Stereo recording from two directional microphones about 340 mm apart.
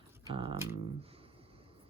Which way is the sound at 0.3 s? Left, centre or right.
Centre.